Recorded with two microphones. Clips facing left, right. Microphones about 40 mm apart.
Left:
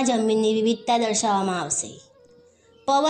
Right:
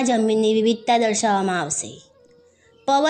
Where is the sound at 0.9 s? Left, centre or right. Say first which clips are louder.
Right 3 dB; right.